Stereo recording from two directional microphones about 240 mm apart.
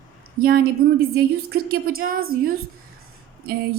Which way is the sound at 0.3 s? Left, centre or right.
Right.